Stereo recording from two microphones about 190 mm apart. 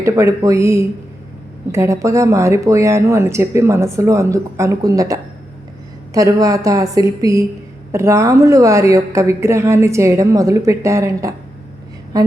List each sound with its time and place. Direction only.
0.0 s speech: 15° right (ahead or behind)